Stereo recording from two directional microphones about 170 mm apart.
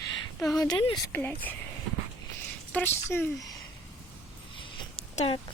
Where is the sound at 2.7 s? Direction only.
15° left (ahead or behind).